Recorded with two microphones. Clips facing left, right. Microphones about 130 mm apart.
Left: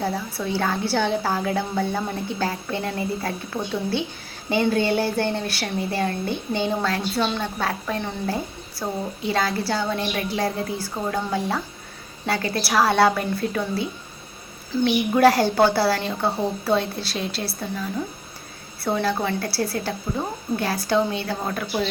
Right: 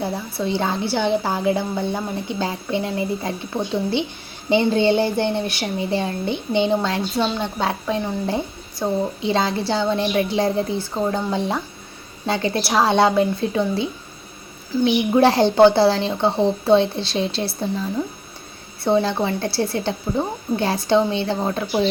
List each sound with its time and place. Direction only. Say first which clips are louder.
0.3 s a woman's voice: right 6 dB; 20° right (ahead or behind)
15.1 s speech: right 1 dB; 25° right (ahead or behind)
18.9 s speech: right 2 dB; 20° right (ahead or behind)